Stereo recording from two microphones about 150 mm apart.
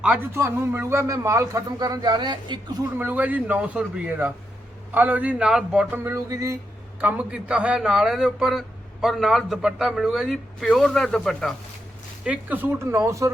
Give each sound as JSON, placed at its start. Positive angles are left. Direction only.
{"t": 0.0, "sound": "speech", "side_deg": -10}
{"t": 0.3, "sound": "speech", "side_deg": -20}
{"t": 3.0, "sound": "speech", "side_deg": -10}
{"t": 7.0, "sound": "a man's voice", "side_deg": -10}
{"t": 12.2, "sound": "speech", "side_deg": -10}